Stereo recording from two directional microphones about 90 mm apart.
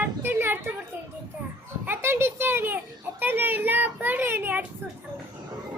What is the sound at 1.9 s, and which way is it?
A child's voice, 25° right (ahead or behind).